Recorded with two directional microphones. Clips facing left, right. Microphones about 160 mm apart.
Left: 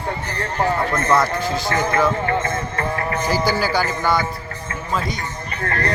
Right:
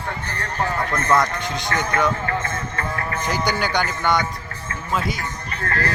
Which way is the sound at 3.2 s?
5° left (ahead or behind).